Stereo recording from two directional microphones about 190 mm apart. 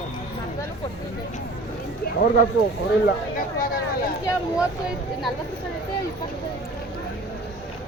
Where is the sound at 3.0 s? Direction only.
50° left (ahead or behind).